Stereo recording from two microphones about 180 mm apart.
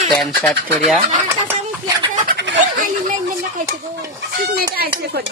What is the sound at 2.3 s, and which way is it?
Bird, 75° right (ahead or behind).